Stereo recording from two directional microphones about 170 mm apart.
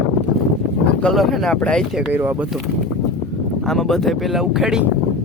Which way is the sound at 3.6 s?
Centre (ahead or behind).